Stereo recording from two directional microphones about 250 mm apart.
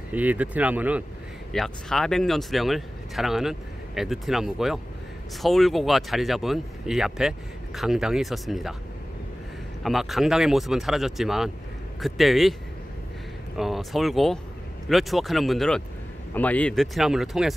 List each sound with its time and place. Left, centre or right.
0.1 s speech: centre
9.8 s speech: centre
13.6 s speech: centre